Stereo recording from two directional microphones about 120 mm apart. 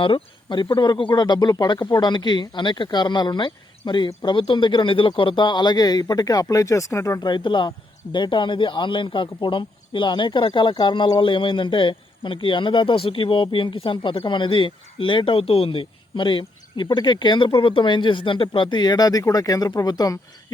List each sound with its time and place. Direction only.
0.0 s speech: 45° left (ahead or behind); by 7.3 s 25° left (ahead or behind)
7.3 s speech: 40° left (ahead or behind)